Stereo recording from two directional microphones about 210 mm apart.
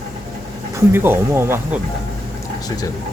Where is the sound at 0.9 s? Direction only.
10° right (ahead or behind).